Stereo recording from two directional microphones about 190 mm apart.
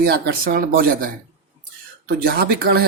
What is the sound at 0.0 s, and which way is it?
Speech, 50° right (ahead or behind).